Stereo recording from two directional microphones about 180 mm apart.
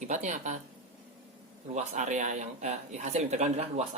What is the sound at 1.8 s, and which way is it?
Speech, 40° right (ahead or behind).